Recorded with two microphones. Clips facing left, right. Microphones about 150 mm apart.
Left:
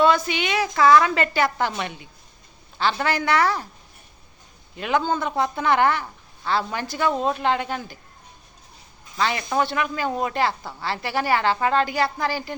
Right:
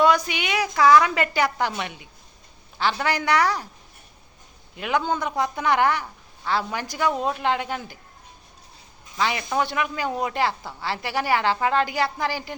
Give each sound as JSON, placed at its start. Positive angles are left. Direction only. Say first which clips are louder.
{"t": 0.0, "sound": "a woman's voice", "louder": "left 1 dB", "side_deg": -15}
{"t": 4.8, "sound": "a woman's voice", "louder": "left 1 dB", "side_deg": -15}
{"t": 9.1, "sound": "a woman's voice", "louder": "left 1 dB", "side_deg": -15}